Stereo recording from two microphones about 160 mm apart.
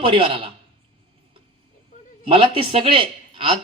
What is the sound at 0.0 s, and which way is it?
Speech, 35° right (ahead or behind).